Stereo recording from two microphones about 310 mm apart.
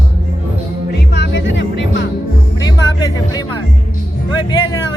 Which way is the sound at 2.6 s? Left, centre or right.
Centre.